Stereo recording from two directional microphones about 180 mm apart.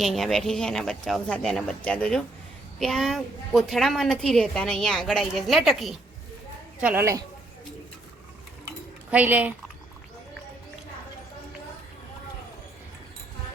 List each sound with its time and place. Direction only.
0.0 s a woman's voice: centre (ahead or behind)
6.8 s speech: 15° right (ahead or behind)
9.0 s speech: 10° right (ahead or behind)